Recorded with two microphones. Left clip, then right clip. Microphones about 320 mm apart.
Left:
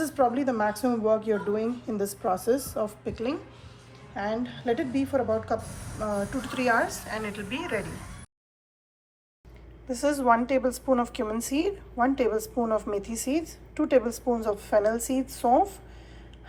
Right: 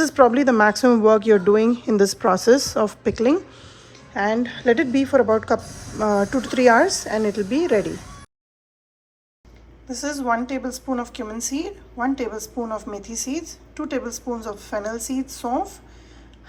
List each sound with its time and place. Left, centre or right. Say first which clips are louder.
0.0 s speech: right 9 dB; right
9.8 s a woman's voice: left 1 dB; centre